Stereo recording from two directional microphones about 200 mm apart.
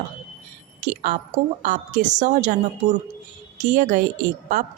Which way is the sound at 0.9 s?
40° right (ahead or behind).